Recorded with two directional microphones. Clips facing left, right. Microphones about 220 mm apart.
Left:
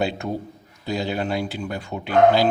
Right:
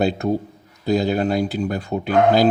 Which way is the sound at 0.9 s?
40° right (ahead or behind).